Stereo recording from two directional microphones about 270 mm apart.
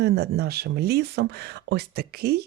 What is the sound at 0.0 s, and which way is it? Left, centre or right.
Speech, right.